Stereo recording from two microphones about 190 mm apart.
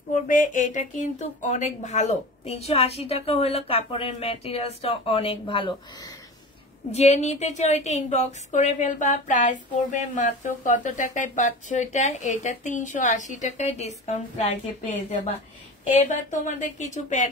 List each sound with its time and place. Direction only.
0.1 s a woman's voice: 45° left (ahead or behind)